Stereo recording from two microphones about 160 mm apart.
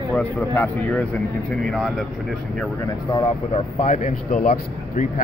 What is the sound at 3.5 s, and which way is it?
Speech, 50° left (ahead or behind).